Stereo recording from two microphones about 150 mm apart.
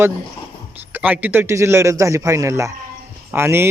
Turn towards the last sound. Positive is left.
turn(degrees=-15)  # may be behind; listen again after turning